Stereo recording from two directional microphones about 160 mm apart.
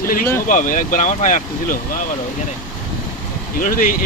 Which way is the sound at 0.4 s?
55° left (ahead or behind).